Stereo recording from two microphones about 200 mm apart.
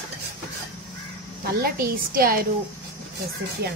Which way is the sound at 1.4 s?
50° right (ahead or behind).